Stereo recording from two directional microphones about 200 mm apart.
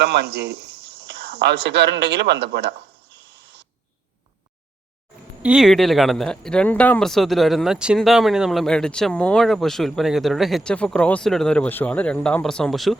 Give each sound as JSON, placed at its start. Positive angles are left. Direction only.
{"t": 0.0, "sound": "speech", "side_deg": -55}
{"t": 3.2, "sound": "owl", "side_deg": -60}
{"t": 5.4, "sound": "speech", "side_deg": -5}